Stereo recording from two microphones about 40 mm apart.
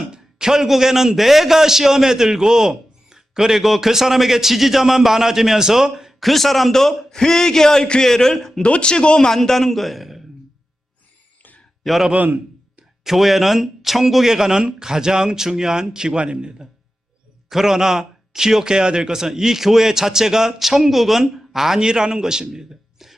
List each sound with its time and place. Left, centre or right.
0.1 s a man's voice: centre
8.6 s speech: left
9.3 s a man's voice: centre
11.8 s a man's voice: centre
13.1 s a man's voice: centre; by 16.6 s right
17.5 s a man's voice: centre